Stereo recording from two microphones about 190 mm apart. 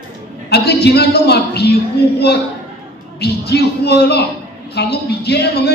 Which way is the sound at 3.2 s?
60° left (ahead or behind).